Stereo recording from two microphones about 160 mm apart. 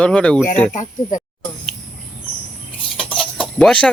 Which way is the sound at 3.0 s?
5° left (ahead or behind).